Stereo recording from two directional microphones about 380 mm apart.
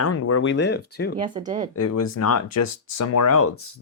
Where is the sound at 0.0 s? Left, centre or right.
Left.